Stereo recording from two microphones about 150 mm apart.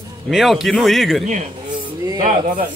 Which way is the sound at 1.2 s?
50° right (ahead or behind).